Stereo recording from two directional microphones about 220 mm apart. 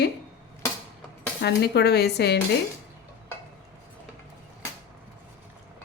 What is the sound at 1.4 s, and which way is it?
A woman's voice, 50° left (ahead or behind).